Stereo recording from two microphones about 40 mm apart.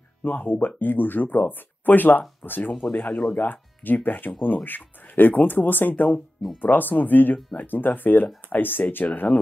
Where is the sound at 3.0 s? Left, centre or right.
Left.